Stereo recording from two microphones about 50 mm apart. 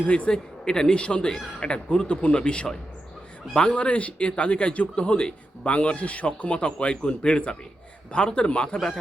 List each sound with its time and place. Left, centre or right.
0.0 s a man's voice: left
0.3 s a man's voice: centre